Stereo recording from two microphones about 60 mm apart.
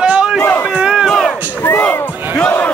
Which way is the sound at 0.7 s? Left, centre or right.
Centre.